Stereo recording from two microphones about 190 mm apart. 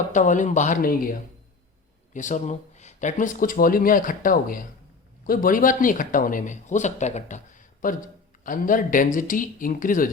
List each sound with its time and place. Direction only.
0.1 s speech: 40° left (ahead or behind)
2.1 s speech: 40° left (ahead or behind)